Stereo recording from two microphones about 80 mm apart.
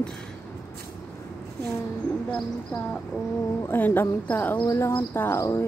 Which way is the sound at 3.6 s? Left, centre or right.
Left.